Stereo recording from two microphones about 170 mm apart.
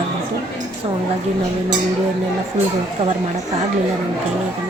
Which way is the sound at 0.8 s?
30° right (ahead or behind).